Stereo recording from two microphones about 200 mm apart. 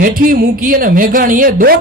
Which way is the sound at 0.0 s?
45° right (ahead or behind).